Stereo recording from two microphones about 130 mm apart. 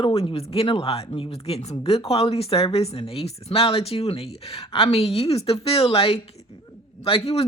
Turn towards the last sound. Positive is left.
turn(degrees=50)  # may be behind; listen again after turning